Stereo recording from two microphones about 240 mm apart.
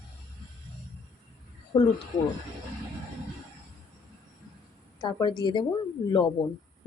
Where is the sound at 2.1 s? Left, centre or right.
Centre.